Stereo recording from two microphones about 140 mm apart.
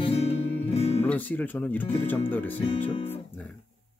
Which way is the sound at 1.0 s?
10° left (ahead or behind).